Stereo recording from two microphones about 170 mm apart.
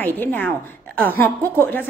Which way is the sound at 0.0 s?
10° left (ahead or behind).